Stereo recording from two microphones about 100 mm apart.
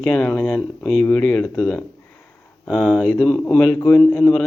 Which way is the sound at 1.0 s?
20° left (ahead or behind).